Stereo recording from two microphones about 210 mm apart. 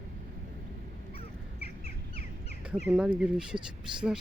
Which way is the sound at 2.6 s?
5° right (ahead or behind).